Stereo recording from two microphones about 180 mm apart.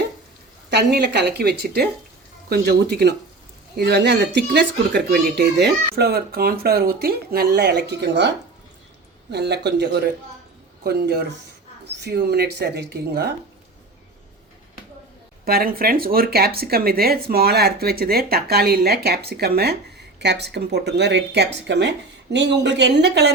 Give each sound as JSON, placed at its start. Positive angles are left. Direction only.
{"t": 0.7, "sound": "speech", "side_deg": -70}
{"t": 9.3, "sound": "speech", "side_deg": -70}
{"t": 15.4, "sound": "speech", "side_deg": -55}